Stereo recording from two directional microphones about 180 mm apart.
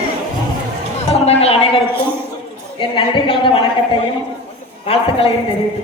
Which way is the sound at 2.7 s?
30° left (ahead or behind).